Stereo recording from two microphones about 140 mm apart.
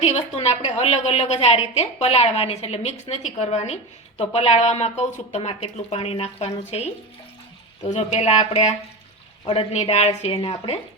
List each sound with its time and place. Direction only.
0.0 s a woman's voice: 50° left (ahead or behind)
7.9 s a woman's voice: 50° left (ahead or behind)